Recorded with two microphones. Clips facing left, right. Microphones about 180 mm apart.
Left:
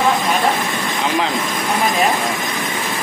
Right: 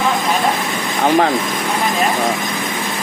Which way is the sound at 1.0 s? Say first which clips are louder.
Right 7 dB; 50° right (ahead or behind).